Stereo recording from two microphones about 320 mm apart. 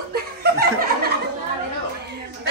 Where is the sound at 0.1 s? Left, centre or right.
Right.